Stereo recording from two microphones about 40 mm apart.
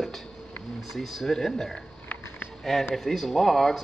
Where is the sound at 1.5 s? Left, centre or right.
Centre.